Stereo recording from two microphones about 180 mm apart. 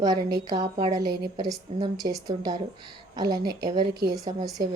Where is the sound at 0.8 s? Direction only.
20° right (ahead or behind).